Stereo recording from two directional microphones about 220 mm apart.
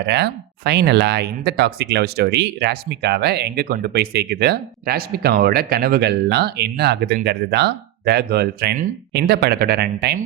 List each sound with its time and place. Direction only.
0.0 s speech: 50° right (ahead or behind)